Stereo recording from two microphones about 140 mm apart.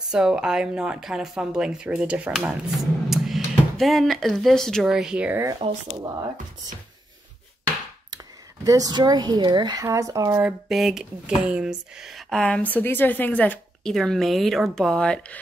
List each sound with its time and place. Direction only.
0.1 s speech: 5° right (ahead or behind)
5.6 s speech: 30° right (ahead or behind)
8.6 s speech: 25° right (ahead or behind)
10.4 s speech: centre (ahead or behind)